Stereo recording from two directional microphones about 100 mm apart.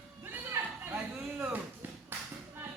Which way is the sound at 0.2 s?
20° right (ahead or behind).